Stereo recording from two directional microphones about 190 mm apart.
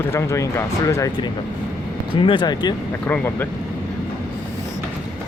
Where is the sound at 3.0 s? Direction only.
10° left (ahead or behind).